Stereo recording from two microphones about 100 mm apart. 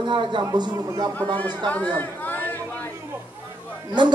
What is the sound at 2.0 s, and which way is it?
Chatter, 20° left (ahead or behind).